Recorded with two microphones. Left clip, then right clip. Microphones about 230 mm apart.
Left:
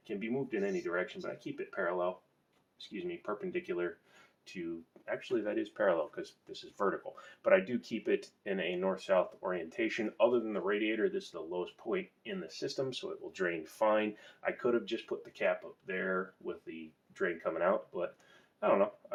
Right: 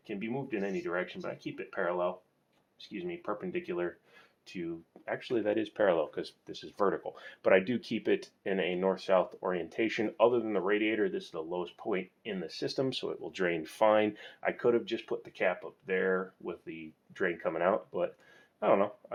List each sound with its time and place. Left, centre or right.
0.1 s speech: right
5.0 s speech: right